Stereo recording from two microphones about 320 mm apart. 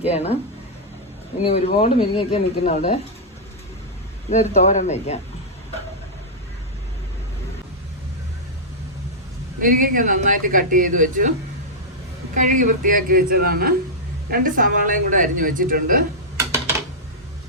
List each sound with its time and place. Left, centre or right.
1.5 s speech: centre
4.3 s speech: left
9.6 s speech: right
16.4 s computer keyboard: centre